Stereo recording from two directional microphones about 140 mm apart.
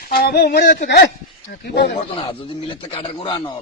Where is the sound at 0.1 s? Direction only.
90° left.